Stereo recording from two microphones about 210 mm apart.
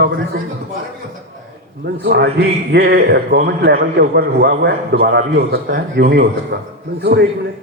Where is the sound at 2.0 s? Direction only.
50° right (ahead or behind).